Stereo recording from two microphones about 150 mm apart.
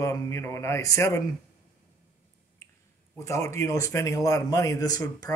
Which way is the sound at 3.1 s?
20° left (ahead or behind).